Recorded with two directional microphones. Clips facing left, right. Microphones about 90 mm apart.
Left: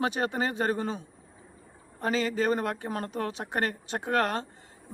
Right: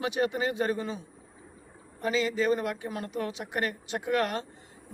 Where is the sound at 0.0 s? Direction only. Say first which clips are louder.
Even; 40° left (ahead or behind).